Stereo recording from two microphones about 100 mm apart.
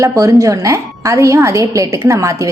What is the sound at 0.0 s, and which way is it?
A woman's voice, 35° right (ahead or behind).